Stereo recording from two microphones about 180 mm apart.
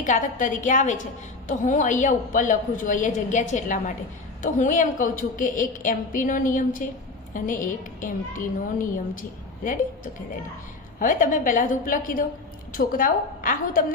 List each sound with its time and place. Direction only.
0.0 s a woman's voice: 45° left (ahead or behind)
11.0 s a woman's voice: 45° left (ahead or behind)